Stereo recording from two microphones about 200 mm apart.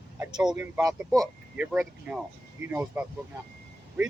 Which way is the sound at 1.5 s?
5° right (ahead or behind).